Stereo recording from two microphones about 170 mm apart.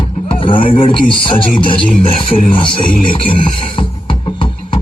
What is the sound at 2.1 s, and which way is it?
Speech, 30° left (ahead or behind).